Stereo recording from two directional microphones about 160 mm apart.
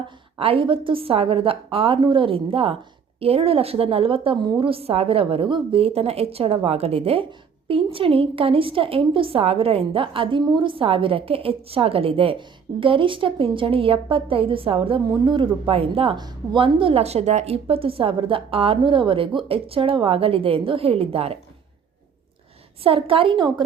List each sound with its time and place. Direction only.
0.3 s a woman's voice: 35° right (ahead or behind)
22.8 s a woman's voice: 35° right (ahead or behind)